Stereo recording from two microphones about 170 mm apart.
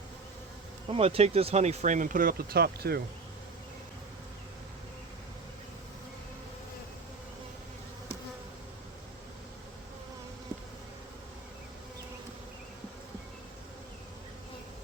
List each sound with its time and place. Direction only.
0.9 s speech: 35° right (ahead or behind); by 3.0 s 70° right (ahead or behind)